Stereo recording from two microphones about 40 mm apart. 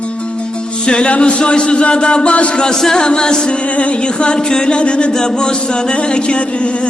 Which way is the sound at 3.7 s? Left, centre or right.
Left.